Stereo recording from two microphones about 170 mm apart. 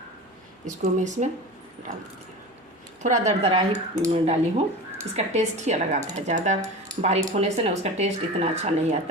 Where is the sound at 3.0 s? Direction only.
45° right (ahead or behind).